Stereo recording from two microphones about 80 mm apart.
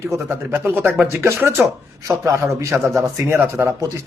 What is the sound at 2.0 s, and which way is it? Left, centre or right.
Speech, right.